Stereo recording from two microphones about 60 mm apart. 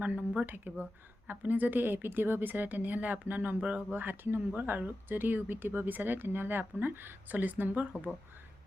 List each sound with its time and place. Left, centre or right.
0.0 s speech: right
3.6 s speech: centre
3.9 s speech: right